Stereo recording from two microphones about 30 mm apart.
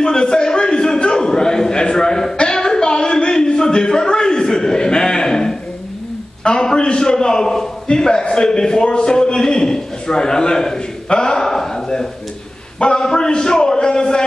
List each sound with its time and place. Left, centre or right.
0.0 s a sound: left
6.4 s a man's voice: left
11.4 s speech: centre
12.7 s a man's voice: left
13.0 s a man's voice: left